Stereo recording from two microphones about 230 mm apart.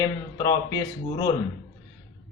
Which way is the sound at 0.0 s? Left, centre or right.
Centre.